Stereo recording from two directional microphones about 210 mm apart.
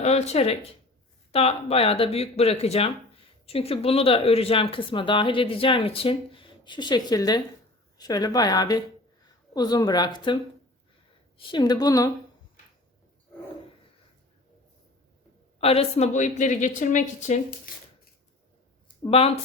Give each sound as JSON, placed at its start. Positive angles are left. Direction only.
{"t": 0.0, "sound": "a woman's voice", "side_deg": 30}
{"t": 15.6, "sound": "a woman's voice", "side_deg": 30}